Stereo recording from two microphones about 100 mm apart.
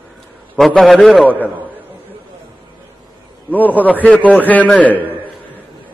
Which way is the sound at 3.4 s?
15° left (ahead or behind).